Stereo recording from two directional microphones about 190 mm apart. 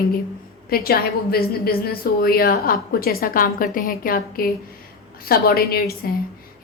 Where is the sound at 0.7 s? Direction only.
55° left (ahead or behind).